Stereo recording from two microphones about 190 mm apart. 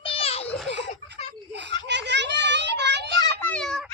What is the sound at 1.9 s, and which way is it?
Children playing, 65° right (ahead or behind).